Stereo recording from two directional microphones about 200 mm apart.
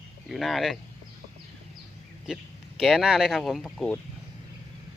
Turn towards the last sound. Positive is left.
turn(degrees=5)  # may be behind; listen again after turning